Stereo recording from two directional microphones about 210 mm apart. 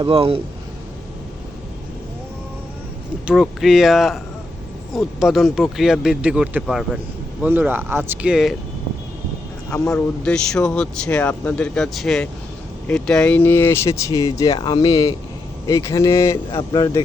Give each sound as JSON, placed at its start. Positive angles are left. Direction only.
{"t": 0.0, "sound": "speech", "side_deg": -25}
{"t": 3.2, "sound": "speech", "side_deg": 0}
{"t": 9.6, "sound": "speech", "side_deg": 15}